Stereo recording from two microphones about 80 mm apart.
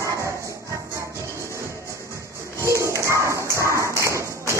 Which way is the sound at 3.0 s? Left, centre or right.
Right.